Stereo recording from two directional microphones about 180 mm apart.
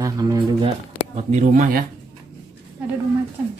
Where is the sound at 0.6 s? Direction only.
35° right (ahead or behind).